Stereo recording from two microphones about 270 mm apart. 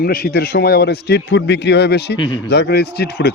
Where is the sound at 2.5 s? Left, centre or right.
Left.